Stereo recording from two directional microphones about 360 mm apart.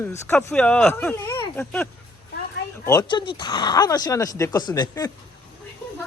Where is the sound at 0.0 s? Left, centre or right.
Centre.